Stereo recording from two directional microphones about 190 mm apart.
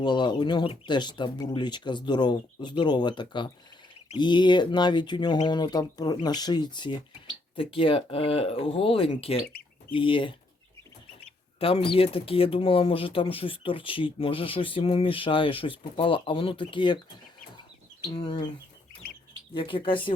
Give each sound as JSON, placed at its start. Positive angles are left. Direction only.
{"t": 0.0, "sound": "speech", "side_deg": 25}
{"t": 11.6, "sound": "speech", "side_deg": 30}
{"t": 18.1, "sound": "speech", "side_deg": 20}
{"t": 19.5, "sound": "speech", "side_deg": 25}